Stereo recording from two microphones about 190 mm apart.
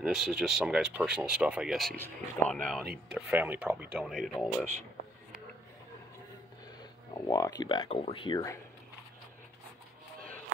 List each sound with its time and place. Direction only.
0.0 s speech: centre (ahead or behind)
3.2 s speech: 5° right (ahead or behind)
6.8 s speech: 20° left (ahead or behind)